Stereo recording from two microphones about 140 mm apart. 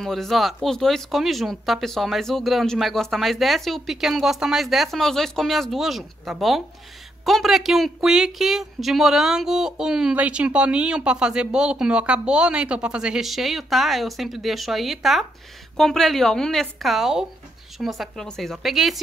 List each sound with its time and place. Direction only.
0.0 s speech: centre (ahead or behind)